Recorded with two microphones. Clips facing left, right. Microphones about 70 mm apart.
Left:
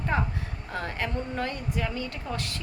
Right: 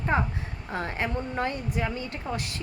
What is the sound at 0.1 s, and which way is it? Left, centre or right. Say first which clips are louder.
A woman's voice: right 3 dB; right.